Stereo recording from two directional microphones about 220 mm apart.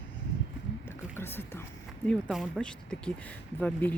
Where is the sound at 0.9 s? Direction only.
10° left (ahead or behind).